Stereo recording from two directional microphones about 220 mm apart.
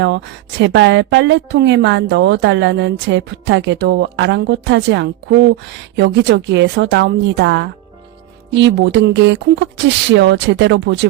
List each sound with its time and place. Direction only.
0.0 s a woman's voice: 55° right (ahead or behind)